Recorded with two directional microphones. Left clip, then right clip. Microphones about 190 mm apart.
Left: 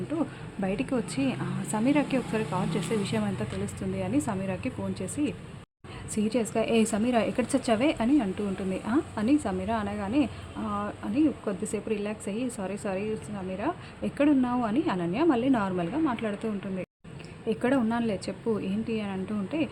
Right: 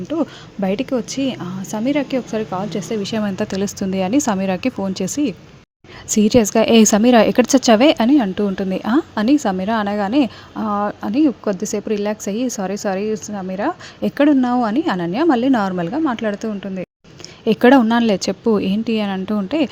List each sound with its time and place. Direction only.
0.1 s a woman's voice: 35° right (ahead or behind)
17.4 s a woman's voice: 45° right (ahead or behind)